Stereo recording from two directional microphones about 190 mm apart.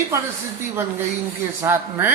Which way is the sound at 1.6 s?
10° right (ahead or behind).